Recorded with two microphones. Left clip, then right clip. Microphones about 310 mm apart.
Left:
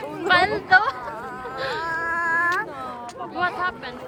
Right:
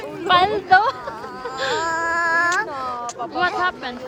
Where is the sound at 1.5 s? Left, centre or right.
Centre.